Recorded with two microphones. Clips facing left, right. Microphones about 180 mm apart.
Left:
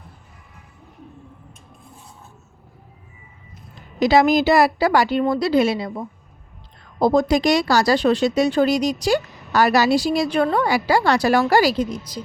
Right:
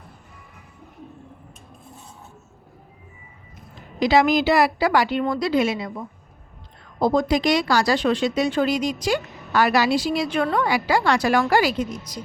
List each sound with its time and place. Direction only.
4.0 s speech: 40° left (ahead or behind)